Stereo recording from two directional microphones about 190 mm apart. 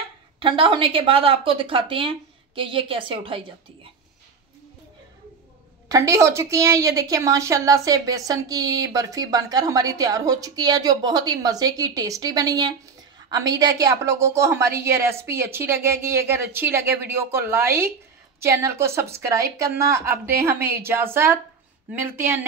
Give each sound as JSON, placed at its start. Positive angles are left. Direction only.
{"t": 0.4, "sound": "a woman's voice", "side_deg": -25}
{"t": 5.9, "sound": "a woman's voice", "side_deg": -15}